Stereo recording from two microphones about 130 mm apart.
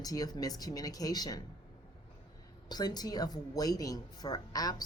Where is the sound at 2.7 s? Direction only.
30° left (ahead or behind).